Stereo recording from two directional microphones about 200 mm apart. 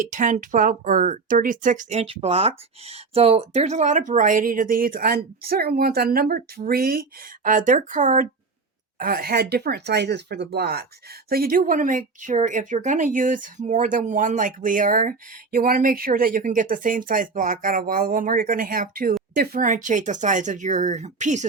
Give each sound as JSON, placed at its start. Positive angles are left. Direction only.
{"t": 0.0, "sound": "speech", "side_deg": -40}